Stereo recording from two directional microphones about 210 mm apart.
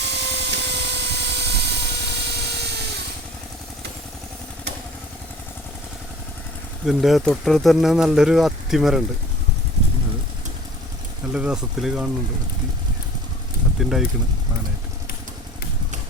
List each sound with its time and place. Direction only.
0.0 s helicopter: 55° right (ahead or behind)
6.8 s speech: centre (ahead or behind)
11.3 s speech: 5° right (ahead or behind)
13.7 s speech: centre (ahead or behind)